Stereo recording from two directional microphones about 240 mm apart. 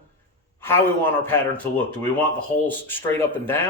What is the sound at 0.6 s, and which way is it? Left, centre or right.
Speech, centre.